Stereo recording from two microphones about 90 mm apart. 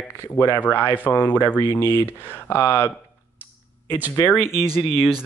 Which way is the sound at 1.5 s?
45° left (ahead or behind).